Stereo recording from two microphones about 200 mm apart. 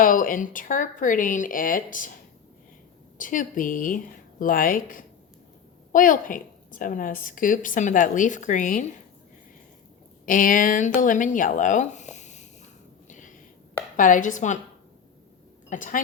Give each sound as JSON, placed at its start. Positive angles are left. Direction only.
{"t": 0.0, "sound": "a woman's voice", "side_deg": 40}
{"t": 3.2, "sound": "a woman's voice", "side_deg": 40}
{"t": 10.2, "sound": "speech", "side_deg": 40}
{"t": 13.1, "sound": "a sound", "side_deg": 40}
{"t": 13.9, "sound": "a woman's voice", "side_deg": 40}
{"t": 15.7, "sound": "a woman's voice", "side_deg": 40}